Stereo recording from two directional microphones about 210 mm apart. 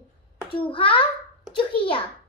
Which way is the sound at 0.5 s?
25° left (ahead or behind).